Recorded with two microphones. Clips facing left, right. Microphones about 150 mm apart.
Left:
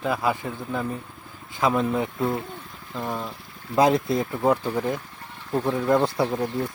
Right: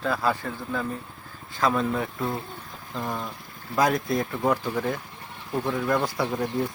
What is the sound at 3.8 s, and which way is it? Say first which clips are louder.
Speech: left 3 dB; 25° left (ahead or behind).